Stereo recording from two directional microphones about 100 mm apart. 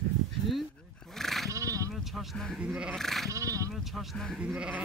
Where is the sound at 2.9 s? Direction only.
5° left (ahead or behind).